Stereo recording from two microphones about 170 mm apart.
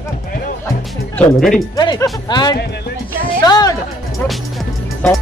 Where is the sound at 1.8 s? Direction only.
25° left (ahead or behind).